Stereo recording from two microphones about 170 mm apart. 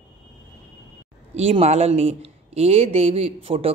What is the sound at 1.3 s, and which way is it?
Speech, 40° right (ahead or behind).